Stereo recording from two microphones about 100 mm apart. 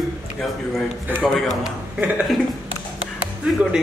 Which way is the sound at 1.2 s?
Centre (ahead or behind).